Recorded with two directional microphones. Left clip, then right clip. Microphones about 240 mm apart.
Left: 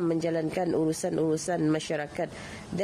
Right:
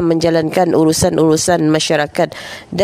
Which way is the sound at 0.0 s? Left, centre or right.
Right.